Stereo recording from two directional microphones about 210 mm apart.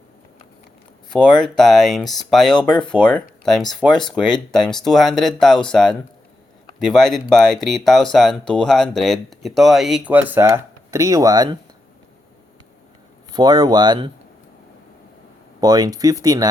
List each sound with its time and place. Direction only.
1.1 s speech: 5° left (ahead or behind)
2.6 s speech: 20° left (ahead or behind)
2.9 s speech: 5° left (ahead or behind); by 11.5 s 20° right (ahead or behind)
13.3 s speech: 20° right (ahead or behind)
15.6 s speech: 20° right (ahead or behind)